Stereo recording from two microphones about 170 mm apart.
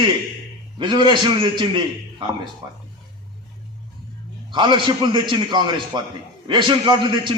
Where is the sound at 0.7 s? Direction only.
30° right (ahead or behind).